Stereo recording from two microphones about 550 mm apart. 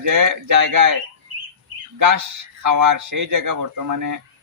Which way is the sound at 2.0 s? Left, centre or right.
Right.